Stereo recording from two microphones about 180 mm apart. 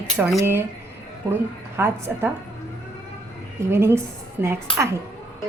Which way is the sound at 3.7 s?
15° right (ahead or behind).